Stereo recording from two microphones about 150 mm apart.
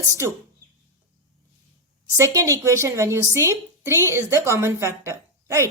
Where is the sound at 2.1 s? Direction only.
20° right (ahead or behind).